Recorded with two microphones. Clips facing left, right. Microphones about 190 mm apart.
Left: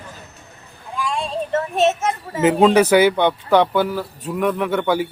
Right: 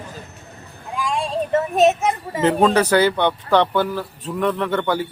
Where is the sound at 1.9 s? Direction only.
15° right (ahead or behind).